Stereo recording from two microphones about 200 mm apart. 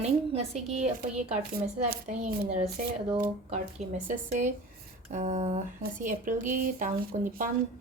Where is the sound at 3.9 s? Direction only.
40° right (ahead or behind).